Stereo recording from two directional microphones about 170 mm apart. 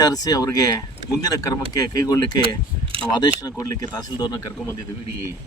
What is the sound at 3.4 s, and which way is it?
Speech, 20° left (ahead or behind).